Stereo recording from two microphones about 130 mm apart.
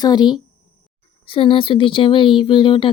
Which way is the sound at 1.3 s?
45° left (ahead or behind).